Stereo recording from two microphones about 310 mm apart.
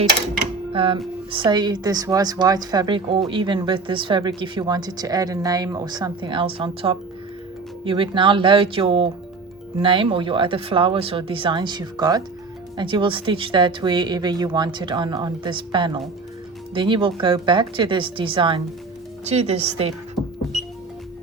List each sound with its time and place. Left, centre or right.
0.7 s a woman's voice: centre